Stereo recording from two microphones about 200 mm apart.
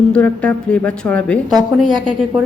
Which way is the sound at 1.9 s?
25° right (ahead or behind).